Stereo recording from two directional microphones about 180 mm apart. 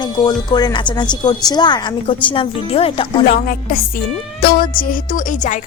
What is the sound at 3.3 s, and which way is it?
Music, 55° left (ahead or behind).